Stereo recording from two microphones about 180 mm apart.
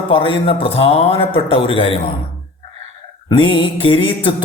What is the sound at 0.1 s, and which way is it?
Speech, 30° left (ahead or behind).